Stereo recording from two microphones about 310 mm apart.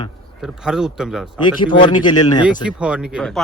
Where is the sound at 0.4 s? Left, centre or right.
Centre.